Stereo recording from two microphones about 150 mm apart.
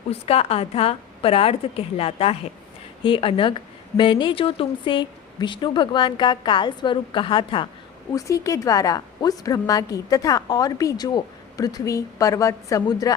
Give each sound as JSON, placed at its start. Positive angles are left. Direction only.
{"t": 0.1, "sound": "a woman's voice", "side_deg": 40}
{"t": 8.1, "sound": "a woman's voice", "side_deg": 20}